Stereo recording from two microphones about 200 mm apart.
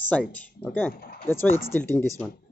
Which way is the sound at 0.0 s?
10° left (ahead or behind).